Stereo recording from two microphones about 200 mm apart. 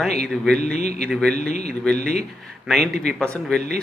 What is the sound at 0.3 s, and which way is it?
Speech, 5° left (ahead or behind).